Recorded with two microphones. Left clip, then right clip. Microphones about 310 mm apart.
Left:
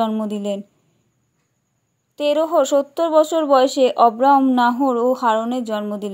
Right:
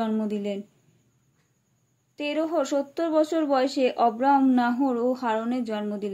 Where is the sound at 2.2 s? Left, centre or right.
Left.